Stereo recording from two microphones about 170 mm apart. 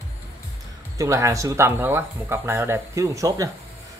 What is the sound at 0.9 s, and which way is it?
Speech, 15° right (ahead or behind).